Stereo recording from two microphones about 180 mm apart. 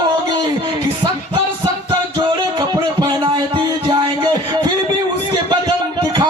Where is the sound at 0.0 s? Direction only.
25° right (ahead or behind).